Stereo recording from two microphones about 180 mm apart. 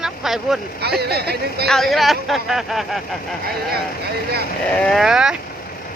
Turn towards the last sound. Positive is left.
turn(degrees=-5)  # may be behind; listen again after turning